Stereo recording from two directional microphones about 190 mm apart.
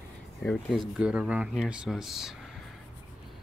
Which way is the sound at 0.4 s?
Centre (ahead or behind).